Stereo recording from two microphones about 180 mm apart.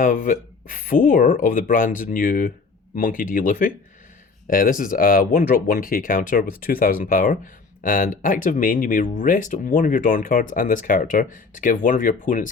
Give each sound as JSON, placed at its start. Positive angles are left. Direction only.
{"t": 0.0, "sound": "speech", "side_deg": 50}